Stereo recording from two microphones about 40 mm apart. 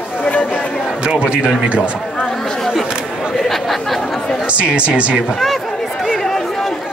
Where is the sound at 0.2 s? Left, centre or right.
Left.